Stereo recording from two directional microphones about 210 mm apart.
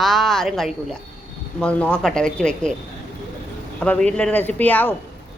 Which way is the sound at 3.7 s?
5° left (ahead or behind).